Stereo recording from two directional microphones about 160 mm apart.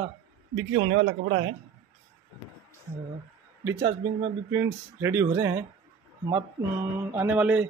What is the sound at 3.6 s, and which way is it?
Speech, 20° right (ahead or behind).